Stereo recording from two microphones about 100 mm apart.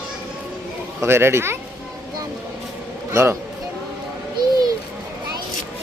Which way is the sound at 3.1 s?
25° right (ahead or behind).